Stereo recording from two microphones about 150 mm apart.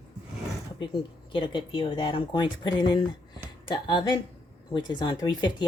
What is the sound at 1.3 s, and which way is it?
Speech, 35° left (ahead or behind).